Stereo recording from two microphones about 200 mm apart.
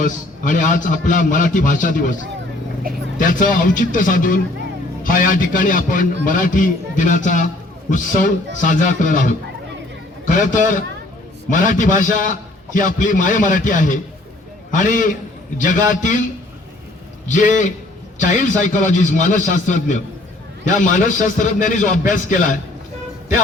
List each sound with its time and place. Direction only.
0.0 s a man's voice: 40° left (ahead or behind)
3.2 s a man's voice: 40° left (ahead or behind)
17.2 s a man's voice: 40° left (ahead or behind)